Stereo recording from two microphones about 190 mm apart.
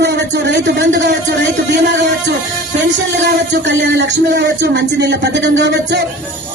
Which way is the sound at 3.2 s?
65° right (ahead or behind).